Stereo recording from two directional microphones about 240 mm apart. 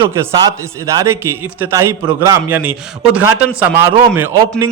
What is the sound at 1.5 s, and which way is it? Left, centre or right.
A man's voice, centre.